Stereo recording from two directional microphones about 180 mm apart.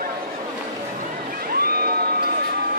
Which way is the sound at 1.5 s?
55° right (ahead or behind).